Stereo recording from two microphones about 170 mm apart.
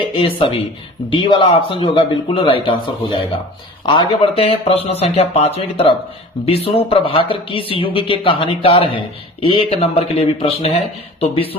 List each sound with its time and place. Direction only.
0.1 s speech: 30° left (ahead or behind)